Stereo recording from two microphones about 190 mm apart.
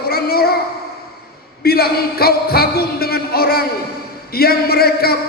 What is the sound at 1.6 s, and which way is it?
A man's voice, 55° left (ahead or behind).